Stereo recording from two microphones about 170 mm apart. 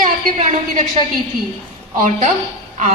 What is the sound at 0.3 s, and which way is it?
Speech, 50° right (ahead or behind).